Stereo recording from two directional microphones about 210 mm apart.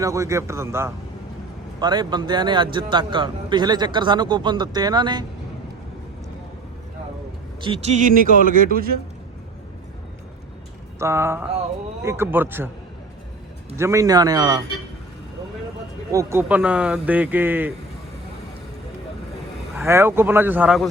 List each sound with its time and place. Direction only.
0.0 s a man's voice: 15° right (ahead or behind)
7.6 s speech: 30° right (ahead or behind)
11.0 s speech: 10° right (ahead or behind)
13.7 s speech: 15° right (ahead or behind)
16.1 s speech: 10° right (ahead or behind)
19.7 s speech: 10° right (ahead or behind)